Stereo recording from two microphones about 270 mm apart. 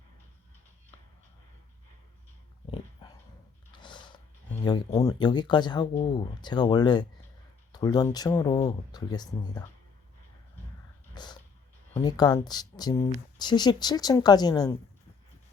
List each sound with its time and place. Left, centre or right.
3.0 s dog: centre
3.8 s a sound: centre
4.6 s speech: centre
11.1 s dog: centre
11.9 s speech: centre